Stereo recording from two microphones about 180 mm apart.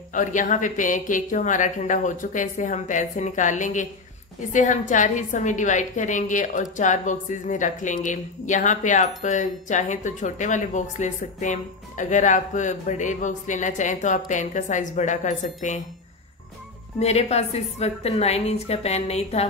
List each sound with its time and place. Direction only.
0.1 s a woman's voice: 45° left (ahead or behind)
17.0 s a woman's voice: 35° left (ahead or behind)